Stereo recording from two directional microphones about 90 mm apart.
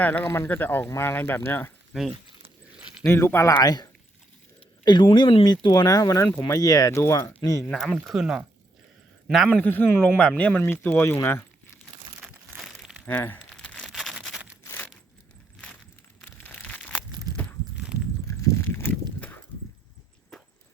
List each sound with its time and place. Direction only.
0.0 s speech: 20° left (ahead or behind)
3.1 s speech: 30° left (ahead or behind)
3.5 s speech: 45° left (ahead or behind)
4.9 s speech: 60° left (ahead or behind); by 7.3 s 30° left (ahead or behind)
7.7 s a man's voice: 5° left (ahead or behind)
9.5 s speech: 20° left (ahead or behind)
11.0 s speech: 25° left (ahead or behind)
12.5 s crumpling: centre (ahead or behind)
13.1 s speech: 20° left (ahead or behind)
13.6 s crumpling: 10° left (ahead or behind)
16.4 s crumpling: 20° left (ahead or behind)
18.3 s a sound: 35° left (ahead or behind)
18.7 s horse: 20° left (ahead or behind)